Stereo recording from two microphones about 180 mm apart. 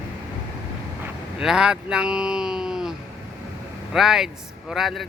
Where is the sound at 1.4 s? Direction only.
5° right (ahead or behind).